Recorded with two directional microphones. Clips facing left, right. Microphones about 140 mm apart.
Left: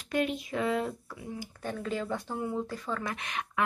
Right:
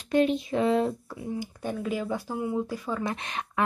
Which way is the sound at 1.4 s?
15° right (ahead or behind).